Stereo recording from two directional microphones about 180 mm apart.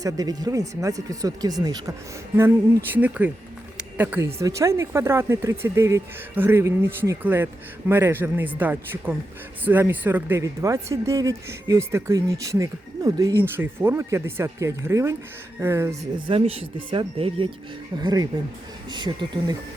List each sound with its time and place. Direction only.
0.0 s speech: 20° right (ahead or behind)
3.8 s a sound: 10° right (ahead or behind)
4.4 s speech: 15° right (ahead or behind)
16.1 s speech: 30° right (ahead or behind)